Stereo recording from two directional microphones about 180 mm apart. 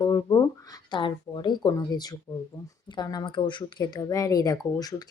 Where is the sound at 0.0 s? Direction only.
20° left (ahead or behind).